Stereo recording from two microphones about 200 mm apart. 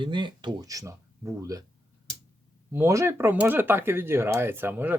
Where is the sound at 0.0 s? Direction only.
25° right (ahead or behind).